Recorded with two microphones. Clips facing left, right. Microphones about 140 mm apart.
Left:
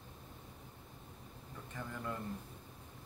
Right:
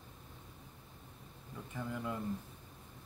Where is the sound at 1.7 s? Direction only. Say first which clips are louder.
Right 3 dB; 10° right (ahead or behind).